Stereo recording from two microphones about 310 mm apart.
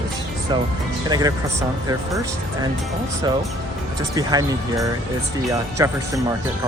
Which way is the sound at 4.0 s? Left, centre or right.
Centre.